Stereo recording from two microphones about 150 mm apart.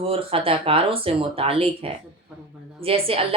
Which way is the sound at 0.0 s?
40° right (ahead or behind).